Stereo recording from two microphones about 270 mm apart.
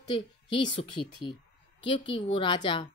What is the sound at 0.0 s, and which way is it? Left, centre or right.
Speech, left.